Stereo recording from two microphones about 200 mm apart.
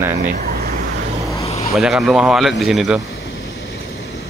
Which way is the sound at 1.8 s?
Centre (ahead or behind).